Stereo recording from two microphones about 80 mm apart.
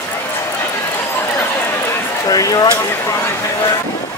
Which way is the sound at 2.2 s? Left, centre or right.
Left.